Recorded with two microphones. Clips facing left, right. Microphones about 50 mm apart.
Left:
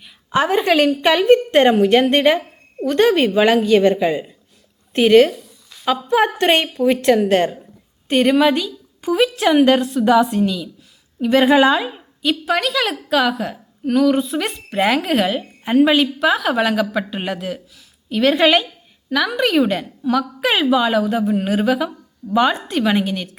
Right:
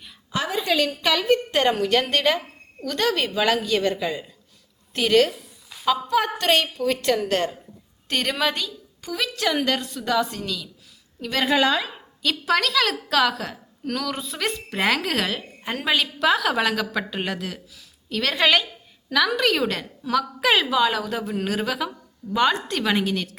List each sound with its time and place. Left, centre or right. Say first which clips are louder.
0.3 s a woman's voice: left 8 dB; left
1.0 s a woman's voice: left 8 dB; left; by 23.3 s centre